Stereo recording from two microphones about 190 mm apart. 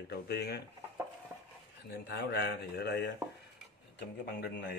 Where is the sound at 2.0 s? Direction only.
60° left (ahead or behind).